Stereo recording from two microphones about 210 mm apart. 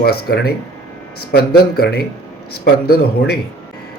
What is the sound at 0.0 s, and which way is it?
Speech, 45° left (ahead or behind).